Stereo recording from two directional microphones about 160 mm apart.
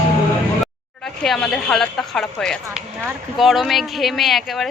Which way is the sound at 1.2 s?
Centre (ahead or behind).